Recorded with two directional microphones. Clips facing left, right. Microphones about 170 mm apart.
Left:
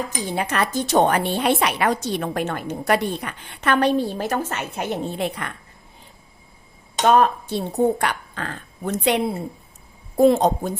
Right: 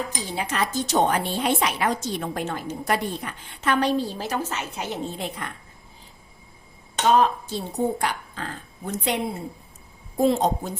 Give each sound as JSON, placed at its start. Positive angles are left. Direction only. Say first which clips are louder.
{"t": 0.3, "sound": "a woman's voice", "louder": "left 4 dB", "side_deg": 60}
{"t": 7.1, "sound": "a woman's voice", "louder": "left 2 dB", "side_deg": 60}
{"t": 10.2, "sound": "a woman's voice", "louder": "left 5 dB", "side_deg": 65}